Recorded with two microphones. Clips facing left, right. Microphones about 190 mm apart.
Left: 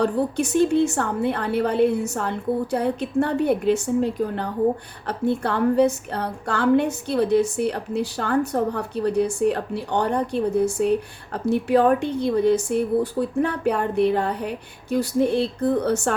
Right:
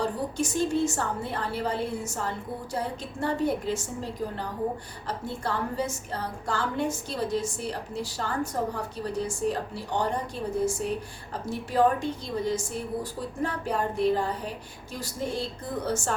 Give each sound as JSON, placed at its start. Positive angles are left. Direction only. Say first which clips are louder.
{"t": 0.0, "sound": "a woman's voice", "louder": "left 7 dB", "side_deg": 65}